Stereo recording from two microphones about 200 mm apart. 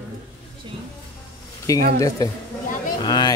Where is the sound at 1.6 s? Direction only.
15° left (ahead or behind).